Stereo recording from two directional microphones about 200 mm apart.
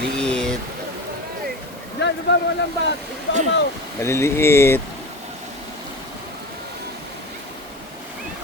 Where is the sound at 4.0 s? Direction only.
15° left (ahead or behind).